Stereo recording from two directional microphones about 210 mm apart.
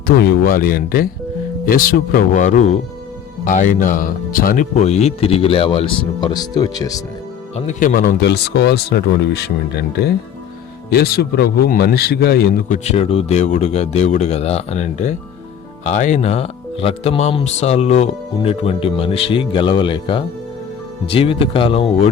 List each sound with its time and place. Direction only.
0.1 s speech: 50° left (ahead or behind); by 7.0 s 15° left (ahead or behind)
7.5 s speech: 35° left (ahead or behind)